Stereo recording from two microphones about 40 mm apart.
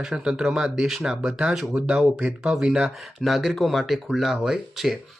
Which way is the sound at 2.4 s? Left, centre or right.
Centre.